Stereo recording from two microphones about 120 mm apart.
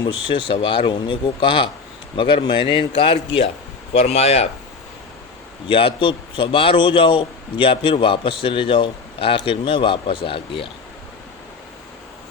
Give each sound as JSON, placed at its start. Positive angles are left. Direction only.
{"t": 0.0, "sound": "a man's voice", "side_deg": 40}
{"t": 3.9, "sound": "speech", "side_deg": 60}
{"t": 5.6, "sound": "a man's voice", "side_deg": 45}